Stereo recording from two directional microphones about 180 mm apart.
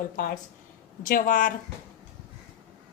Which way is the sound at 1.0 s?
50° left (ahead or behind).